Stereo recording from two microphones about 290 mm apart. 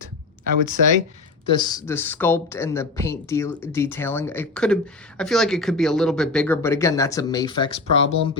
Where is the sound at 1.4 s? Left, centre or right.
Centre.